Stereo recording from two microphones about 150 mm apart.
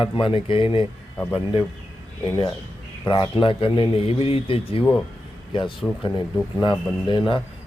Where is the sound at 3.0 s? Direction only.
35° left (ahead or behind).